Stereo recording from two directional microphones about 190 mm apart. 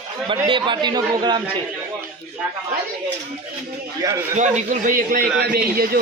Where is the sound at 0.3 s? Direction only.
25° right (ahead or behind).